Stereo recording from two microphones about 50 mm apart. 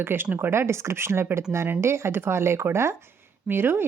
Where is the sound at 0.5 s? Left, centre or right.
Right.